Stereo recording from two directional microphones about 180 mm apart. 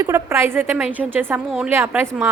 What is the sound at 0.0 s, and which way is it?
A woman's voice, 15° right (ahead or behind).